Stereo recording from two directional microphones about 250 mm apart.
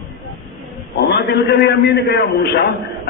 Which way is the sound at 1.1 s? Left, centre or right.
Left.